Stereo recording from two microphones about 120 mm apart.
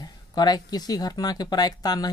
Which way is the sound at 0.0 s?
35° left (ahead or behind).